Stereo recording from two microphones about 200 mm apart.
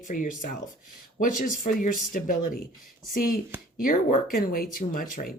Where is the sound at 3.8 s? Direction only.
45° left (ahead or behind).